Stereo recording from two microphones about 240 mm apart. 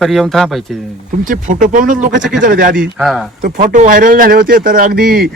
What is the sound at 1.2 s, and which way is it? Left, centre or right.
A man's voice, right.